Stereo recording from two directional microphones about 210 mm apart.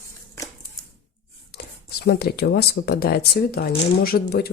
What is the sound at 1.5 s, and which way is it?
Speech, 50° left (ahead or behind).